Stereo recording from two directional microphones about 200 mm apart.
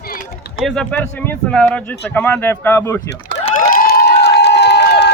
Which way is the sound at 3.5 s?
45° left (ahead or behind).